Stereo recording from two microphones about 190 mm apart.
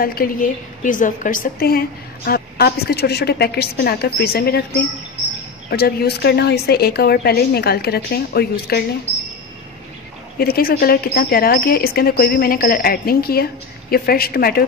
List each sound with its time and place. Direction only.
0.0 s a woman's voice: 50° left (ahead or behind)
10.4 s a woman's voice: 55° left (ahead or behind)